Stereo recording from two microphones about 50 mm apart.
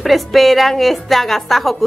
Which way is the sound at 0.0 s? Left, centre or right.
Centre.